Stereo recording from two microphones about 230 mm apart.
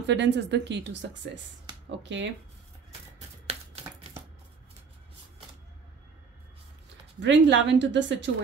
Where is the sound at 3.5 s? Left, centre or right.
Right.